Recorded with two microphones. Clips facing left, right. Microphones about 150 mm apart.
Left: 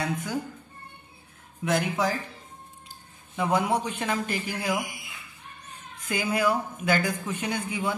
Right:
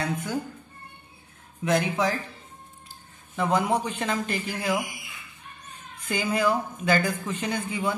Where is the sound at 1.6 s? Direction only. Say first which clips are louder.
Right 2 dB; 5° left (ahead or behind).